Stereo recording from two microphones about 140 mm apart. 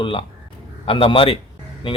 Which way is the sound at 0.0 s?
40° left (ahead or behind).